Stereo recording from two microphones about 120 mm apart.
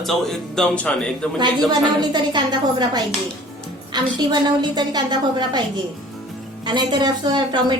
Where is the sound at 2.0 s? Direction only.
40° right (ahead or behind).